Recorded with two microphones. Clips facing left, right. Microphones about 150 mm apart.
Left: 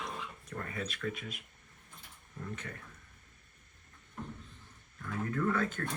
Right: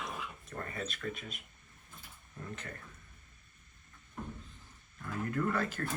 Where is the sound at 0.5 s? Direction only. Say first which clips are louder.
Left 1 dB; 20° right (ahead or behind).